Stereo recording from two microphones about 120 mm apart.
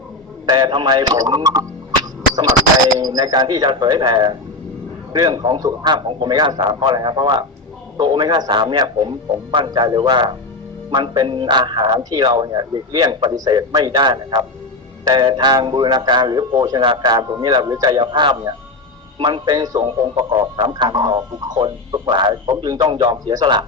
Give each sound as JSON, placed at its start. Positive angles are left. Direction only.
{"t": 0.4, "sound": "speech", "side_deg": -35}
{"t": 3.0, "sound": "speech", "side_deg": -35}